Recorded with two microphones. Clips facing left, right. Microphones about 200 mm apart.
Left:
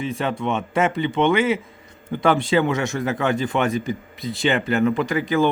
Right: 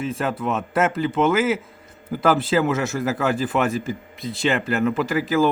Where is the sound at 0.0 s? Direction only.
Centre (ahead or behind).